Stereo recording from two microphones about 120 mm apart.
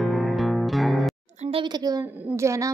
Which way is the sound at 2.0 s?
15° right (ahead or behind).